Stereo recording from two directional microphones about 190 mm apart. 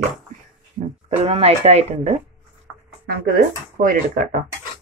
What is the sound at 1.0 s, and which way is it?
Speech, 30° right (ahead or behind).